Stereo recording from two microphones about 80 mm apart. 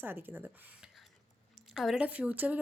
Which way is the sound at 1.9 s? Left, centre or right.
Centre.